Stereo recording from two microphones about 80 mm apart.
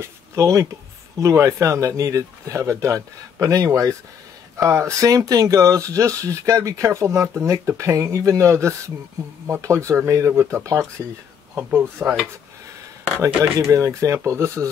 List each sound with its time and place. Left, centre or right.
0.0 s speech: right
12.0 s dishes: centre
13.2 s speech: right